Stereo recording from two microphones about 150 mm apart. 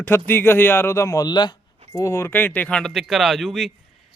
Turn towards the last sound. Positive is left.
turn(degrees=0)  # may be behind; listen again after turning